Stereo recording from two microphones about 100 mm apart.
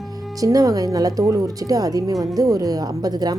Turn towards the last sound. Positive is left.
turn(degrees=-40)  # may be behind; listen again after turning